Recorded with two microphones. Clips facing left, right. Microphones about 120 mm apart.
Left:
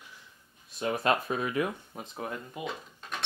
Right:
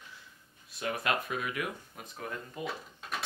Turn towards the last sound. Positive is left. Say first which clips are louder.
# left 1 dB
turn(degrees=0)  # may be behind; listen again after turning